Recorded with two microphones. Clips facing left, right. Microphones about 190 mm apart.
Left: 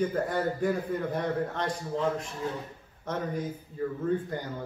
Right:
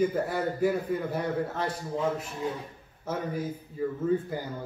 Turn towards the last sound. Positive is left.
turn(degrees=-5)  # may be behind; listen again after turning